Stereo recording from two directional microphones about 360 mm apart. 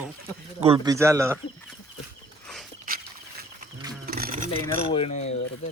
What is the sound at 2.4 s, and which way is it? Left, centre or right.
Walk, centre.